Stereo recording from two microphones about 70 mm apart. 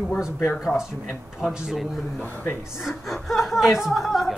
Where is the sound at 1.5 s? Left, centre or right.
Centre.